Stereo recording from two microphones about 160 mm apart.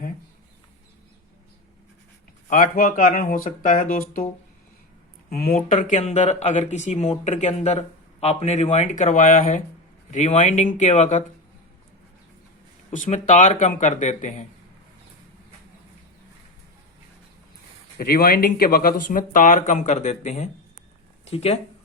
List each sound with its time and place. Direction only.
2.5 s speech: 55° left (ahead or behind)
5.3 s speech: 65° left (ahead or behind)
12.9 s speech: 50° left (ahead or behind)
17.9 s speech: 70° left (ahead or behind); by 21.6 s 40° left (ahead or behind)